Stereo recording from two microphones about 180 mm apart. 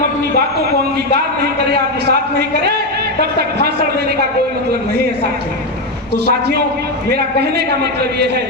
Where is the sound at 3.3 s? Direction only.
60° right (ahead or behind).